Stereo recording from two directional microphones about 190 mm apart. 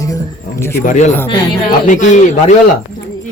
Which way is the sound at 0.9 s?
40° left (ahead or behind).